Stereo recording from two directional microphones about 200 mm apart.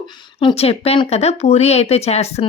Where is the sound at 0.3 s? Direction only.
30° left (ahead or behind).